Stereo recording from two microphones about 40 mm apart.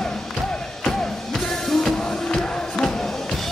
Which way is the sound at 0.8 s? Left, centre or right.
Centre.